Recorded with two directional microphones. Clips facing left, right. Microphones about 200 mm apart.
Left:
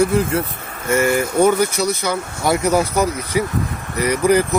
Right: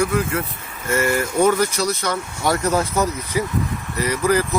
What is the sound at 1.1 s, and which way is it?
Speech, centre (ahead or behind).